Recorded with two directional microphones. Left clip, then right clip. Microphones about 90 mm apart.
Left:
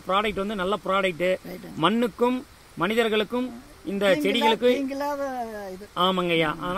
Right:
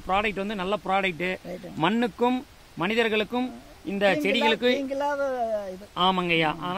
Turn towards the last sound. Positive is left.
turn(degrees=-10)  # may be behind; listen again after turning